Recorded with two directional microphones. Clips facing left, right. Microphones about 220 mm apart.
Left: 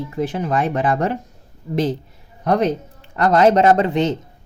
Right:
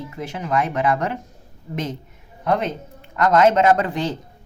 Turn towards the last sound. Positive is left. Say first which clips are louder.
# left 3 dB
turn(degrees=25)  # may be behind; listen again after turning